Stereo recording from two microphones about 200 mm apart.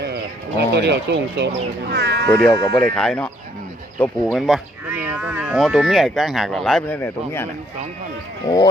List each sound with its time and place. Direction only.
0.7 s speech: 60° right (ahead or behind)
2.5 s speech: 15° left (ahead or behind)
2.7 s speech: 5° left (ahead or behind)
8.4 s speech: 20° left (ahead or behind)